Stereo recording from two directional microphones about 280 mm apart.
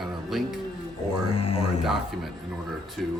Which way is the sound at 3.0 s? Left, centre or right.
Centre.